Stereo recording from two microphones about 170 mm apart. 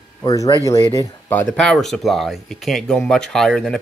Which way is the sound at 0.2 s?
20° left (ahead or behind).